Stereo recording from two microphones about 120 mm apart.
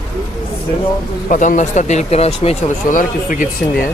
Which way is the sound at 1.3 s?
90° left.